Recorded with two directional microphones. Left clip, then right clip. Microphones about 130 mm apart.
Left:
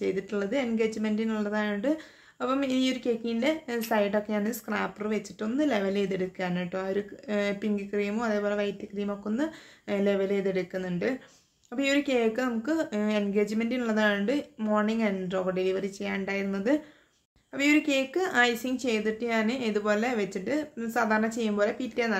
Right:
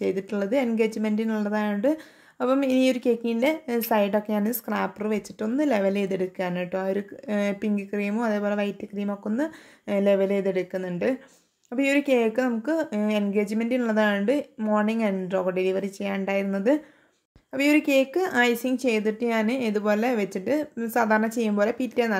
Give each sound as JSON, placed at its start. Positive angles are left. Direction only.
{"t": 0.0, "sound": "speech", "side_deg": -45}